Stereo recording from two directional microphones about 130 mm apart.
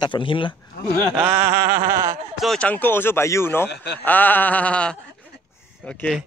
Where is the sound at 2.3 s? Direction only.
5° left (ahead or behind).